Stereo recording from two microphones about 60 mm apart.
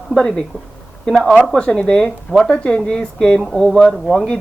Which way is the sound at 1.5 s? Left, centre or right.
Centre.